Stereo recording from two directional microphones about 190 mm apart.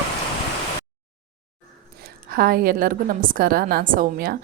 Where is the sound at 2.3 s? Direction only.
50° right (ahead or behind).